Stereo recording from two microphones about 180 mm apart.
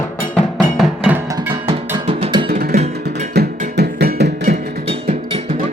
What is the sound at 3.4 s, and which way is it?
Music, 65° right (ahead or behind).